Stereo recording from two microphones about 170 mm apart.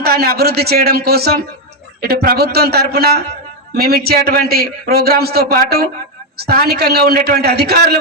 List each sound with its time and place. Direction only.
0.0 s a man's voice: 65° right (ahead or behind)